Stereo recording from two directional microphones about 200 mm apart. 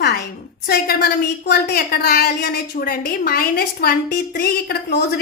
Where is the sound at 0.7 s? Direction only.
55° left (ahead or behind).